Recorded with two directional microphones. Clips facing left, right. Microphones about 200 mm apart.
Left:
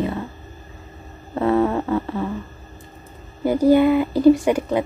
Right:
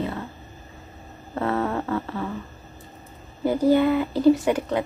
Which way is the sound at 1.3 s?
15° left (ahead or behind).